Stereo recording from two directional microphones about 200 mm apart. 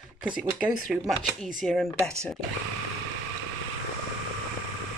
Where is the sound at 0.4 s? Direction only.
5° right (ahead or behind).